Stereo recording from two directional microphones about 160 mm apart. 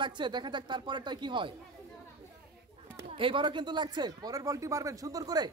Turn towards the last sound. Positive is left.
turn(degrees=-25)  # may be behind; listen again after turning